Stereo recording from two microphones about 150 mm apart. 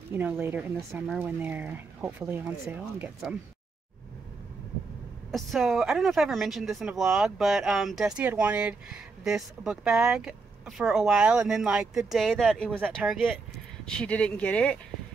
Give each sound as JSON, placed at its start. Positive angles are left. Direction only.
{"t": 0.1, "sound": "speech", "side_deg": -15}
{"t": 1.0, "sound": "speech", "side_deg": 0}
{"t": 5.3, "sound": "speech", "side_deg": 0}
{"t": 12.9, "sound": "speech", "side_deg": -5}
{"t": 13.8, "sound": "speech", "side_deg": 5}